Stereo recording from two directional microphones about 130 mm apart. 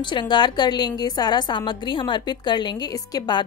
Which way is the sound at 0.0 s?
40° left (ahead or behind).